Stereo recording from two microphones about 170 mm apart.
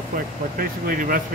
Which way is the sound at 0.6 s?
55° right (ahead or behind).